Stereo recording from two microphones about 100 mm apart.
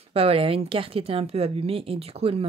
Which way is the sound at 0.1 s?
75° right (ahead or behind).